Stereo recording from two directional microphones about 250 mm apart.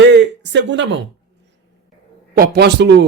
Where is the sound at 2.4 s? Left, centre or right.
Right.